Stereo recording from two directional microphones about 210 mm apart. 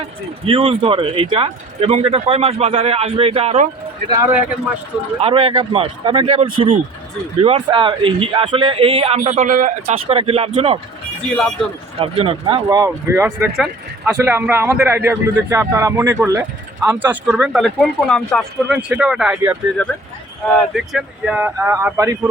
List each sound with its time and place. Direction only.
0.4 s a man's voice: 25° right (ahead or behind)
4.1 s speech: 10° right (ahead or behind)
5.2 s a man's voice: 30° right (ahead or behind)
11.3 s speech: 5° left (ahead or behind)
11.9 s a man's voice: 25° right (ahead or behind)
12.6 s speech: 15° right (ahead or behind)